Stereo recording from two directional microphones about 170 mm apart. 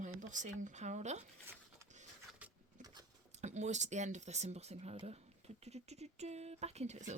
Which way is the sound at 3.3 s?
45° right (ahead or behind).